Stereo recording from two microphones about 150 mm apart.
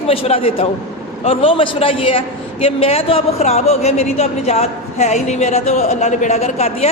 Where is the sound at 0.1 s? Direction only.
40° left (ahead or behind).